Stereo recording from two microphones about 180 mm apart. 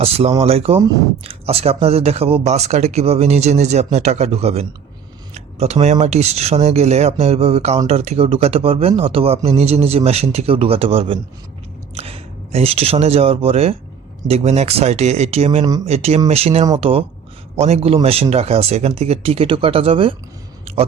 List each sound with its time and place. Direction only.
0.0 s speech: 35° right (ahead or behind)